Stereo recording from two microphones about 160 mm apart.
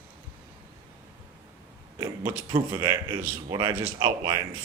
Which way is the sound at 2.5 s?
25° right (ahead or behind).